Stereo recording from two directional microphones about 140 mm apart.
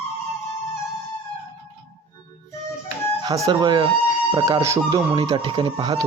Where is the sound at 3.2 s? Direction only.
30° right (ahead or behind).